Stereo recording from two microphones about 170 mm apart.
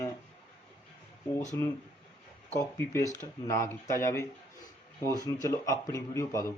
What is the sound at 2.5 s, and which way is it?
A man's voice, 15° left (ahead or behind).